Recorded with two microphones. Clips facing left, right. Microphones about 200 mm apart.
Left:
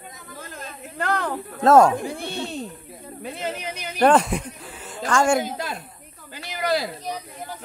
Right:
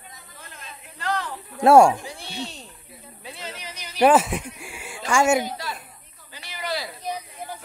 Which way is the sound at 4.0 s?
5° right (ahead or behind).